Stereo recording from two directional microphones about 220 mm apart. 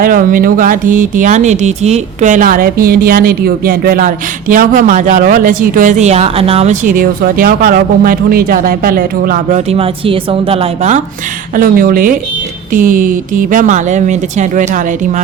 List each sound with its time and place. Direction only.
0.0 s speech: 40° right (ahead or behind)
11.5 s speech: 40° right (ahead or behind)